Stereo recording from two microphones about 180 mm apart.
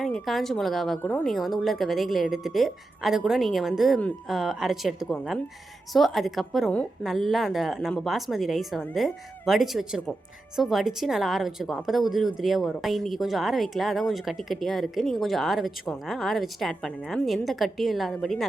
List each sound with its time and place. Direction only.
0.0 s speech: centre (ahead or behind)